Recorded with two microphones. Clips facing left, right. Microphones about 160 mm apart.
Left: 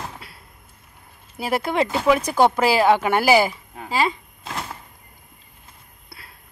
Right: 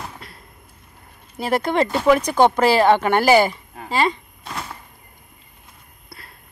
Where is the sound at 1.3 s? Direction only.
5° left (ahead or behind).